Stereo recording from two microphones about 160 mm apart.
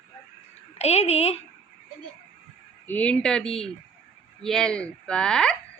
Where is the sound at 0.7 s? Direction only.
40° left (ahead or behind).